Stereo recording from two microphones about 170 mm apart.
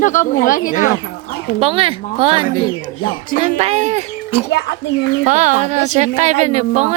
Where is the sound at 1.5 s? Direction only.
35° right (ahead or behind).